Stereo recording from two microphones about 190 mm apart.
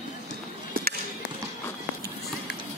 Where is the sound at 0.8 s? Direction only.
50° right (ahead or behind).